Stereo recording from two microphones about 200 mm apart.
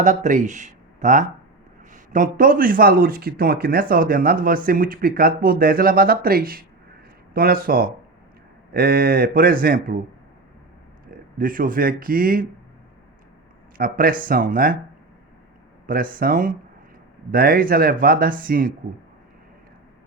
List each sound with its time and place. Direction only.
0.0 s a man's voice: 40° right (ahead or behind)
11.3 s a man's voice: 45° right (ahead or behind)
13.7 s a man's voice: 45° right (ahead or behind)
15.9 s a man's voice: 45° right (ahead or behind)